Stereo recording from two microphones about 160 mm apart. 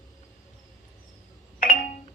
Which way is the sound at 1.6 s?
55° left (ahead or behind).